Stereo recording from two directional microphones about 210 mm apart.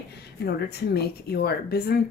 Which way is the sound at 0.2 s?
50° left (ahead or behind).